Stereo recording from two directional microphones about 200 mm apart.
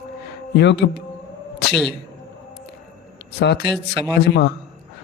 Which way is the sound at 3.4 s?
55° left (ahead or behind).